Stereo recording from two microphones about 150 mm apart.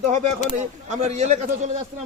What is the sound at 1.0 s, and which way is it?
Speech, 50° right (ahead or behind).